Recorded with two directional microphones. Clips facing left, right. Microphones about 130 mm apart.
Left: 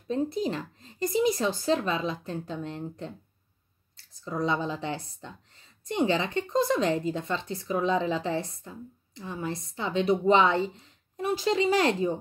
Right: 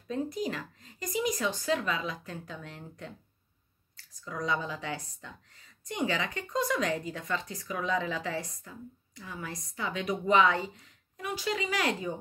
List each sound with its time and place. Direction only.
0.1 s speech: 30° left (ahead or behind)